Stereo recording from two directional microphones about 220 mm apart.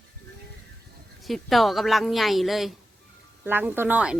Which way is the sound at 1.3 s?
Centre (ahead or behind).